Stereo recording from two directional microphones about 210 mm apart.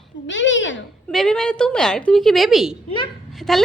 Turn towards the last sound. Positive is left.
turn(degrees=0)  # may be behind; listen again after turning